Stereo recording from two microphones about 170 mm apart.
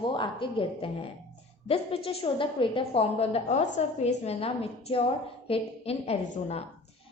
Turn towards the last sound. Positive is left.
turn(degrees=40)  # may be behind; listen again after turning